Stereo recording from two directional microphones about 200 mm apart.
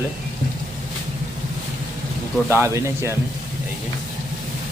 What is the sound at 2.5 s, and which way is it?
Speech, 15° right (ahead or behind).